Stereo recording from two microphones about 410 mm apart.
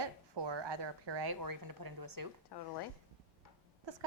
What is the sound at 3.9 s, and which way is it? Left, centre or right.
Speech, right.